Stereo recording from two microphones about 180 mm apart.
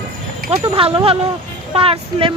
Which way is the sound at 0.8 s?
30° right (ahead or behind).